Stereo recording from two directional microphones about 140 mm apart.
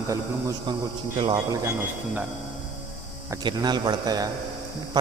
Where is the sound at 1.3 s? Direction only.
25° right (ahead or behind).